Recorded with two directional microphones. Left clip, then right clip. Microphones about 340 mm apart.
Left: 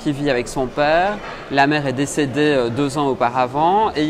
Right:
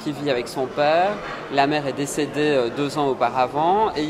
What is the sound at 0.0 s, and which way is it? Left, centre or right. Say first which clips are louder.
Speech: left 4 dB; left.